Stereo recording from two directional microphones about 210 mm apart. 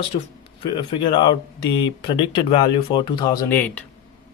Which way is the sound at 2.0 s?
25° left (ahead or behind).